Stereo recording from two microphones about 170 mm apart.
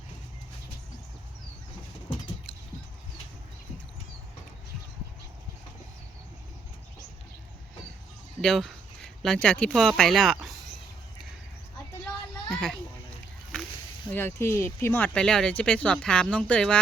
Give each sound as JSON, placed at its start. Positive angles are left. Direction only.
{"t": 8.4, "sound": "speech", "side_deg": 0}
{"t": 12.5, "sound": "a sound", "side_deg": 0}
{"t": 14.1, "sound": "speech", "side_deg": 10}